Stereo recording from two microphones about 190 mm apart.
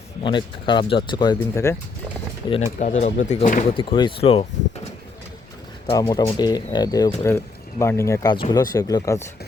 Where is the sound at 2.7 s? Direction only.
40° left (ahead or behind).